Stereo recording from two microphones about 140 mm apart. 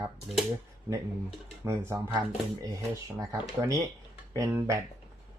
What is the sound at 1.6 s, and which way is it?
Speech, 20° right (ahead or behind).